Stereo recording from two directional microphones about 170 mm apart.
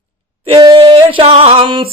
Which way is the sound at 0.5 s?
30° right (ahead or behind).